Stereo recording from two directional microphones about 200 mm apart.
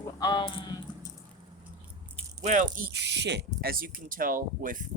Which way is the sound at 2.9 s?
60° right (ahead or behind).